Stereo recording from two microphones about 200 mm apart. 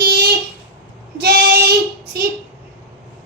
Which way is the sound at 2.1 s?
50° right (ahead or behind).